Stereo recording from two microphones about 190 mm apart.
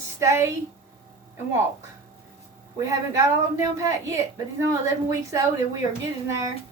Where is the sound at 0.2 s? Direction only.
15° right (ahead or behind).